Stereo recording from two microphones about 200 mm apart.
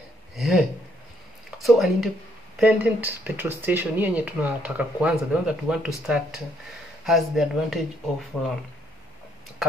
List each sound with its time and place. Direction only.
0.4 s speech: centre (ahead or behind)